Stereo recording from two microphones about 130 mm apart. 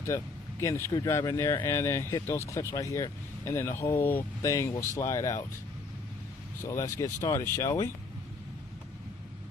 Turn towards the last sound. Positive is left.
turn(degrees=20)  # may be behind; listen again after turning